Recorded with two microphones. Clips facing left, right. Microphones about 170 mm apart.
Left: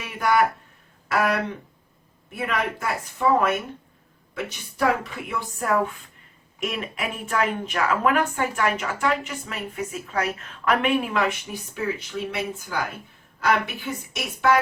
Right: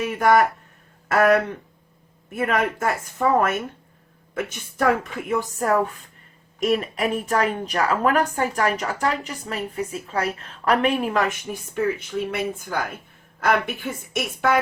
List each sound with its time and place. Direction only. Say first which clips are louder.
0.0 s a woman's voice: right 4 dB; 45° right (ahead or behind)